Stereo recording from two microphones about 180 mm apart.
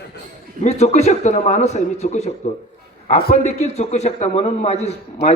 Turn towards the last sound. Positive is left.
turn(degrees=40)  # may be behind; listen again after turning